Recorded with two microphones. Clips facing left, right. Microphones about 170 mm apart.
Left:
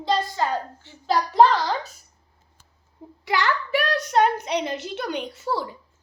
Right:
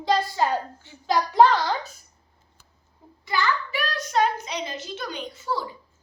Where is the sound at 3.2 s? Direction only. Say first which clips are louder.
Left 2 dB; 80° left.